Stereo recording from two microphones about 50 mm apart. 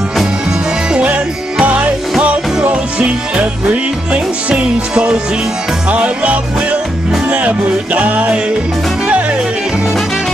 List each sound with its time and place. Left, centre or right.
0.9 s music: right